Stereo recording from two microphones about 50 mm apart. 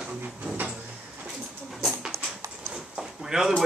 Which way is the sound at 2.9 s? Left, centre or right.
Centre.